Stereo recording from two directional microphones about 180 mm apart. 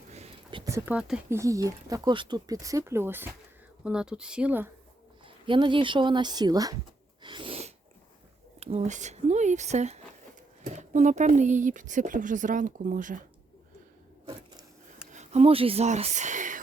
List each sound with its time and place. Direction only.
0.1 s a sound: 35° right (ahead or behind)
0.6 s a sound: 15° right (ahead or behind)
0.9 s speech: 5° right (ahead or behind)
1.4 s speech: 20° right (ahead or behind)
5.2 s speech: 25° right (ahead or behind)
7.2 s sneeze: 25° right (ahead or behind)
8.6 s speech: 40° right (ahead or behind)
15.1 s speech: 40° right (ahead or behind)